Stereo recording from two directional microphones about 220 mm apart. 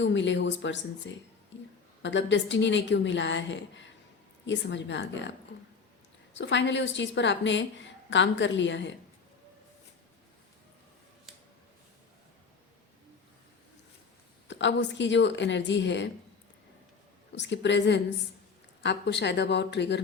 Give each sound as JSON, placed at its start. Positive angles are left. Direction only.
{"t": 0.0, "sound": "a woman's voice", "side_deg": 55}
{"t": 6.3, "sound": "a woman's voice", "side_deg": 55}
{"t": 14.4, "sound": "a woman's voice", "side_deg": 55}
{"t": 17.3, "sound": "speech", "side_deg": 55}